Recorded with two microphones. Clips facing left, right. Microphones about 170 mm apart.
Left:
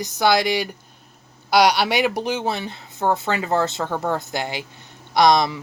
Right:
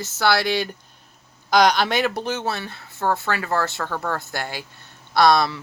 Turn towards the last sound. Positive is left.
turn(degrees=15)  # may be behind; listen again after turning